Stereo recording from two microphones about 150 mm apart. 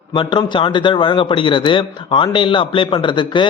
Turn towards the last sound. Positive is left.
turn(degrees=30)  # may be behind; listen again after turning